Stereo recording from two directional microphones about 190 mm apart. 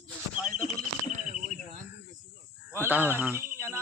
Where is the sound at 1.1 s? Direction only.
40° right (ahead or behind).